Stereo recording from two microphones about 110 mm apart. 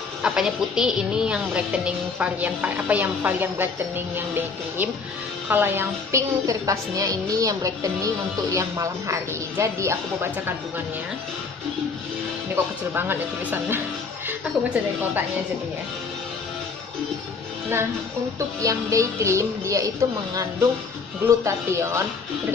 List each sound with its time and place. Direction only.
0.2 s a woman's voice: 5° right (ahead or behind)
6.4 s a woman's voice: 30° right (ahead or behind)
12.5 s a woman's voice: 20° right (ahead or behind)
18.6 s a woman's voice: 30° right (ahead or behind)